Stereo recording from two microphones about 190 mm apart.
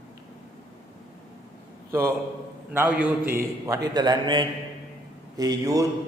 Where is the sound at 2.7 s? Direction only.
10° right (ahead or behind).